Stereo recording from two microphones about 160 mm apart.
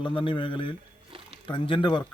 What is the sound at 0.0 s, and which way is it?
Speech, 30° left (ahead or behind).